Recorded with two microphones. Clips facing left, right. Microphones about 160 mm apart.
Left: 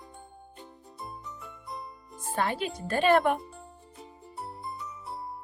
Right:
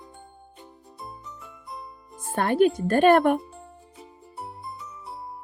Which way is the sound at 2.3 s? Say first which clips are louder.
Right 10 dB; 55° right (ahead or behind).